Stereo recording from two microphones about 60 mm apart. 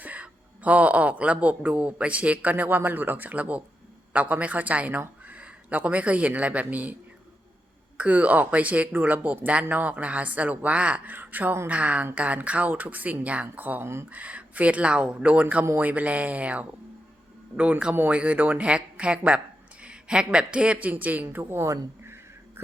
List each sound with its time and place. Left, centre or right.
0.0 s speech: right
7.9 s speech: right
11.1 s speech: right
13.8 s speech: right
14.1 s speech: right
22.0 s a sound: right